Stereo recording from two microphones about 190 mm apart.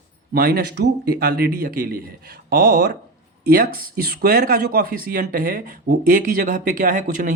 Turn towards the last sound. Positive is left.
turn(degrees=-45)  # may be behind; listen again after turning